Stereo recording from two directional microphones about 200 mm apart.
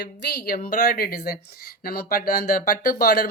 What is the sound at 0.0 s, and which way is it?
Speech, 50° left (ahead or behind).